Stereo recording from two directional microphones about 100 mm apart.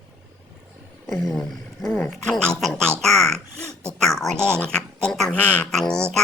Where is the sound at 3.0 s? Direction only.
5° left (ahead or behind).